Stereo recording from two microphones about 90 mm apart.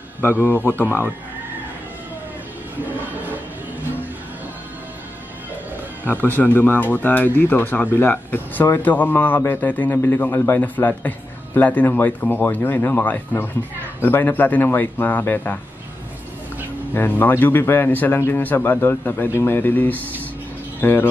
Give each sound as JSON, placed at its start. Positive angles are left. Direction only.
{"t": 0.2, "sound": "a man's voice", "side_deg": 25}
{"t": 6.0, "sound": "a man's voice", "side_deg": 20}
{"t": 16.9, "sound": "a man's voice", "side_deg": 20}